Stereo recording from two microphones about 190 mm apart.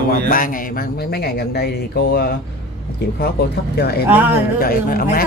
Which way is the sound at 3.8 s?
55° left (ahead or behind).